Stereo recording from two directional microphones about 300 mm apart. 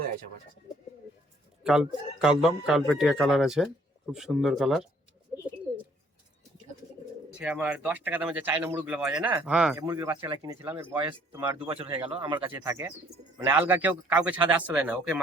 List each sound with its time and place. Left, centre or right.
1.6 s speech: centre
7.3 s speech: centre
11.7 s speech: centre